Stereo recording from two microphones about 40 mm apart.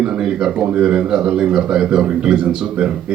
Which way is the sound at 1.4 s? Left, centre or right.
Right.